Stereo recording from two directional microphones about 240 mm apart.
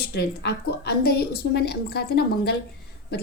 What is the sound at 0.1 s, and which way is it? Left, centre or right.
A woman's voice, left.